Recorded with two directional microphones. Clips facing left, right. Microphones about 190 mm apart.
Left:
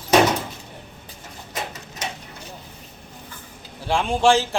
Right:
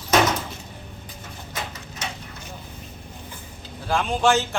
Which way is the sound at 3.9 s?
30° left (ahead or behind).